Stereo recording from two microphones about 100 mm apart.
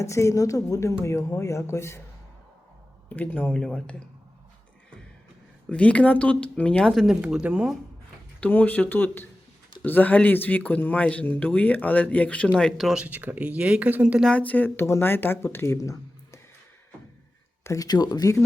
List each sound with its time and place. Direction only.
0.0 s speech: 30° left (ahead or behind)
3.1 s speech: 15° left (ahead or behind)
5.6 s speech: 10° left (ahead or behind); by 7.8 s 10° right (ahead or behind)
8.4 s speech: 15° left (ahead or behind)
12.7 s speech: centre (ahead or behind)
13.0 s speech: 15° right (ahead or behind)
14.3 s speech: 15° left (ahead or behind); by 16.4 s 30° left (ahead or behind)
17.6 s a sound: 30° left (ahead or behind)
17.8 s speech: 40° left (ahead or behind)